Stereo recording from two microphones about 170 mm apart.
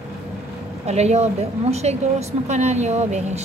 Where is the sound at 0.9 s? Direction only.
40° right (ahead or behind).